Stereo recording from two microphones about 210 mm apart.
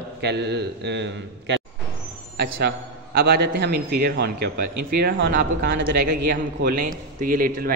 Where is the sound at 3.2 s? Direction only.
50° right (ahead or behind).